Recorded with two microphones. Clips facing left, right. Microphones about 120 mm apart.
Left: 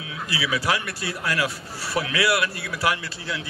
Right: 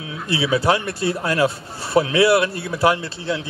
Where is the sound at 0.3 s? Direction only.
25° right (ahead or behind).